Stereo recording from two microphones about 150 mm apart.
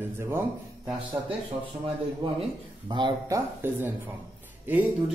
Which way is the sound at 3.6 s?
15° right (ahead or behind).